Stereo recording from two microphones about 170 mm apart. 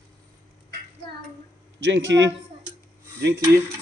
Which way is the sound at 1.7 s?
90° right.